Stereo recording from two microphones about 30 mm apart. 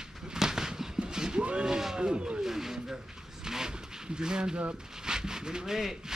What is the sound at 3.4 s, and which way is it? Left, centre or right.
Vehicle, centre.